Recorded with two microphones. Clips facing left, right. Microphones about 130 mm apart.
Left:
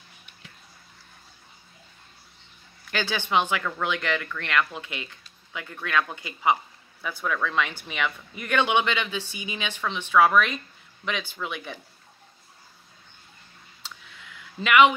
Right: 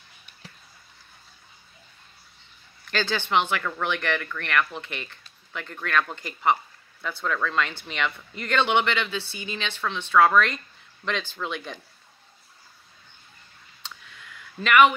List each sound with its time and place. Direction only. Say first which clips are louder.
2.9 s speech: right 1 dB; 15° left (ahead or behind)
14.6 s speech: even; 15° left (ahead or behind)